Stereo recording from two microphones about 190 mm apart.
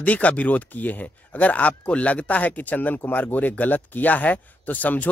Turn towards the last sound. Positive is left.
turn(degrees=10)  # may be behind; listen again after turning